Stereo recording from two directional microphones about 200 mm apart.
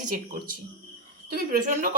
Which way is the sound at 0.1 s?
45° right (ahead or behind).